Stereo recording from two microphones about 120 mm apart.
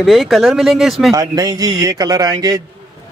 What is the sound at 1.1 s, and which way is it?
Speech, 30° right (ahead or behind).